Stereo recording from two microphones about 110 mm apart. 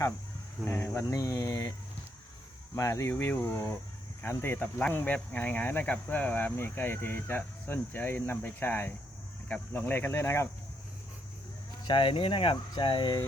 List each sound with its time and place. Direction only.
0.6 s speech: 20° left (ahead or behind)
1.1 s speech: 30° left (ahead or behind)
2.7 s speech: 25° left (ahead or behind)
11.9 s speech: 50° left (ahead or behind)